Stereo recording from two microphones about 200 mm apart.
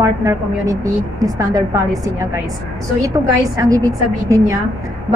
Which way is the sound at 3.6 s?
15° right (ahead or behind).